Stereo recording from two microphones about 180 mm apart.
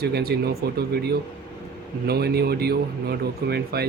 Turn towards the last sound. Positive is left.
turn(degrees=-65)  # may be behind; listen again after turning